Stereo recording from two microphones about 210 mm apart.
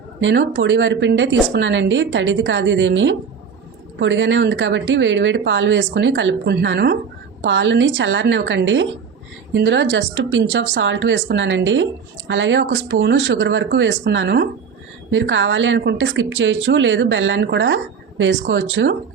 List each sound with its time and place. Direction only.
0.2 s a woman's voice: 60° right (ahead or behind)